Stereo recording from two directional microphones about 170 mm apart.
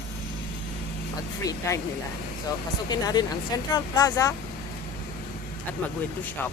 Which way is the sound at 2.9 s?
25° left (ahead or behind).